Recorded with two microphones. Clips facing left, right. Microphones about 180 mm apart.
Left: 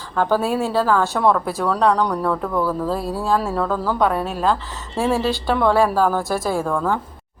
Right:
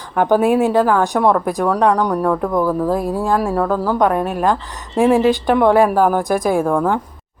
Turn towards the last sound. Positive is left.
turn(degrees=-15)  # may be behind; listen again after turning